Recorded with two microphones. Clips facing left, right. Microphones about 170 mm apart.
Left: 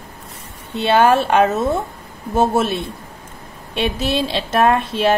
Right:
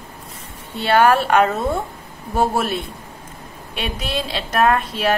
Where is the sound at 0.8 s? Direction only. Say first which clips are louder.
Left 1 dB; 25° left (ahead or behind).